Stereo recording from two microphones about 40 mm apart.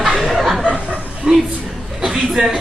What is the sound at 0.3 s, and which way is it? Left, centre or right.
Chuckle, centre.